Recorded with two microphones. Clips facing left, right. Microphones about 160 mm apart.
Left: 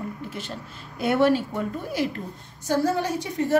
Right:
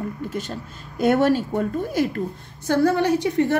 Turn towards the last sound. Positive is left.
turn(degrees=-65)  # may be behind; listen again after turning